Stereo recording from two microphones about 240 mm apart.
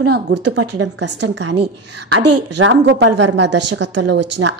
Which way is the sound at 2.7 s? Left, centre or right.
Right.